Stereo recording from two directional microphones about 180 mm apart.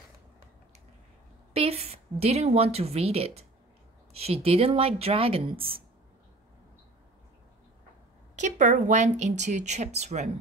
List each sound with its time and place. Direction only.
1.5 s a woman's voice: 35° right (ahead or behind)
8.4 s speech: 45° right (ahead or behind)